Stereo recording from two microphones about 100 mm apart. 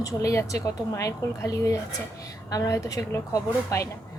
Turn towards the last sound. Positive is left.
turn(degrees=30)  # may be behind; listen again after turning